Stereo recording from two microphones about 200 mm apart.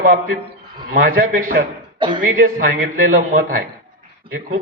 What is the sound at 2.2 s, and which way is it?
A man's voice, 45° right (ahead or behind).